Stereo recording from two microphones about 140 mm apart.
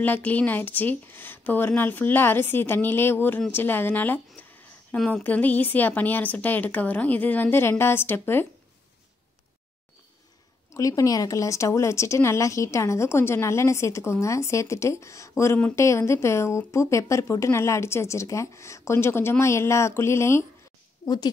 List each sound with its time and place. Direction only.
0.0 s speech: 10° left (ahead or behind)
10.7 s speech: 25° left (ahead or behind)
21.0 s speech: 30° left (ahead or behind)